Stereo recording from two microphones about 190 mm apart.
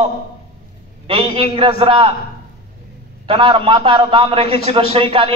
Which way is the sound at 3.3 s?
30° right (ahead or behind).